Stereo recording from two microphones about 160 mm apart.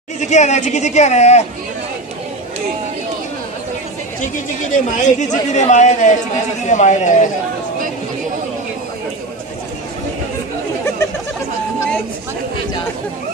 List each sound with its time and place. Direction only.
0.2 s speech: 45° left (ahead or behind)
4.6 s speech: 50° left (ahead or behind)